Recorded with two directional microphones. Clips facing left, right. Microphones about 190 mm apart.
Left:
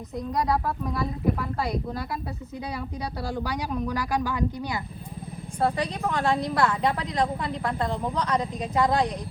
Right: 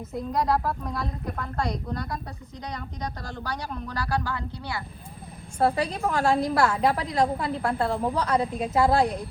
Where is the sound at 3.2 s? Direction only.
10° left (ahead or behind).